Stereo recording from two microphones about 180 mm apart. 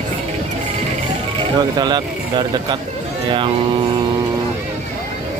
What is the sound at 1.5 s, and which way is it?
Speech, 25° right (ahead or behind).